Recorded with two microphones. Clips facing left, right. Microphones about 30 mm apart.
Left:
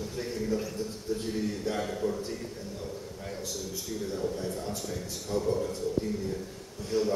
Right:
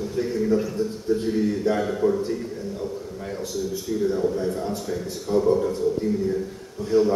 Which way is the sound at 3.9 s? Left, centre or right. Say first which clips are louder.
Right 12 dB; centre.